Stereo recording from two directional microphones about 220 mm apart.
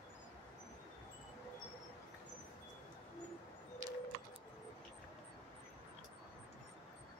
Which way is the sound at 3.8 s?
65° right (ahead or behind).